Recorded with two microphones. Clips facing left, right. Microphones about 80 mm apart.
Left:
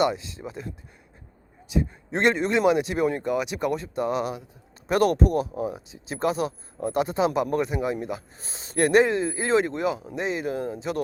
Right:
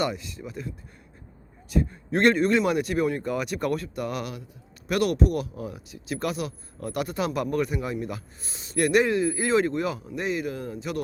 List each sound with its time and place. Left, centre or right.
0.0 s speech: left
1.7 s speech: centre
4.9 s speech: left
8.4 s speech: left